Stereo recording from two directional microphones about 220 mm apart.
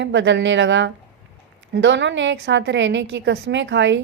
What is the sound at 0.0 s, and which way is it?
A woman's voice, 55° right (ahead or behind).